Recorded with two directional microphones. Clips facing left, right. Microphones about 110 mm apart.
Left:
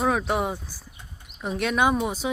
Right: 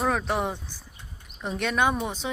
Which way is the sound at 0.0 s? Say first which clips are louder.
Left 2 dB; 5° left (ahead or behind).